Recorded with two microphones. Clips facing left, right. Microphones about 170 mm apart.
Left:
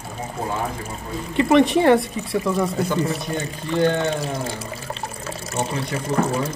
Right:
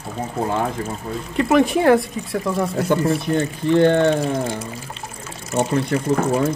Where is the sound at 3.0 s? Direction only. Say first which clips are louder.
Right 6 dB; 60° right (ahead or behind).